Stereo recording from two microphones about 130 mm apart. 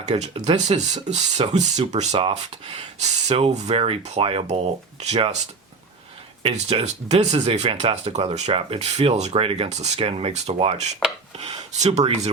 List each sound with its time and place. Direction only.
0.0 s speech: 60° right (ahead or behind)
3.0 s speech: 55° right (ahead or behind)
6.4 s speech: 50° right (ahead or behind)